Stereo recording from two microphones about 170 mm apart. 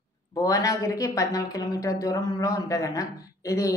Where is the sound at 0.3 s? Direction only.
20° left (ahead or behind).